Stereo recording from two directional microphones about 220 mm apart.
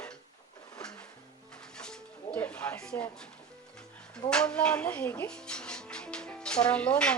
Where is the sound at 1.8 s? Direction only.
5° left (ahead or behind).